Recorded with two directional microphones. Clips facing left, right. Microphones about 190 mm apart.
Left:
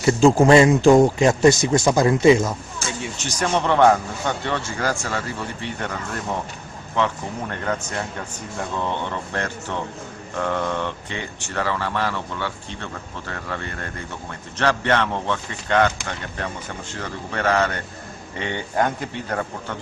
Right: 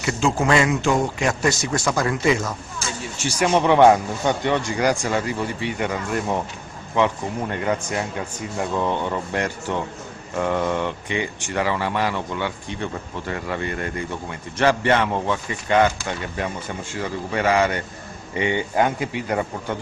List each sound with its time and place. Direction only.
0.0 s speech: 35° left (ahead or behind)
3.2 s speech: 10° right (ahead or behind)
7.0 s speech: 15° right (ahead or behind)
9.1 s speech: 10° right (ahead or behind)